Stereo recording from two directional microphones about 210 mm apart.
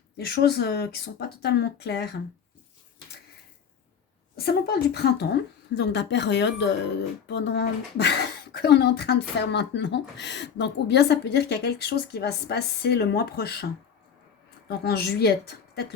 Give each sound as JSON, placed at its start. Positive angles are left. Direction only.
{"t": 0.2, "sound": "speech", "side_deg": 50}
{"t": 4.4, "sound": "speech", "side_deg": 50}
{"t": 14.7, "sound": "speech", "side_deg": 50}